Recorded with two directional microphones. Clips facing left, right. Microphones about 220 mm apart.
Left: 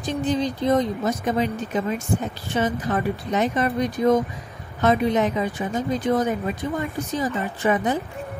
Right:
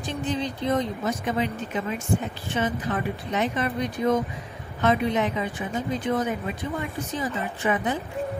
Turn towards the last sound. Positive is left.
turn(degrees=40)  # may be behind; listen again after turning